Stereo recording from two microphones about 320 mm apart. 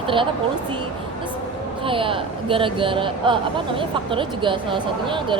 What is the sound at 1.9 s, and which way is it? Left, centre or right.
Speech, centre.